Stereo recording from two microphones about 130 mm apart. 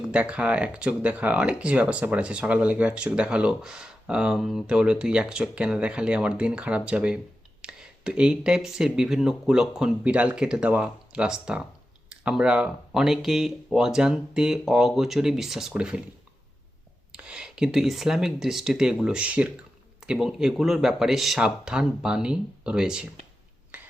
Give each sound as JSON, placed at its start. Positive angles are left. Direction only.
{"t": 0.0, "sound": "speech", "side_deg": -10}
{"t": 17.1, "sound": "speech", "side_deg": -10}
{"t": 23.7, "sound": "a sound", "side_deg": -15}